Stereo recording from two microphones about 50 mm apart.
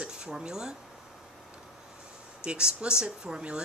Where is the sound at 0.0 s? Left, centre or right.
Centre.